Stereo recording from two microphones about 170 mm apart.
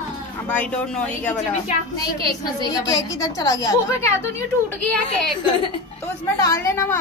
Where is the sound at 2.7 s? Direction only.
20° left (ahead or behind).